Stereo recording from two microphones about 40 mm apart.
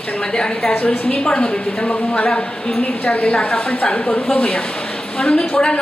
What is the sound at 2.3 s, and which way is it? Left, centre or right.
Speech, centre.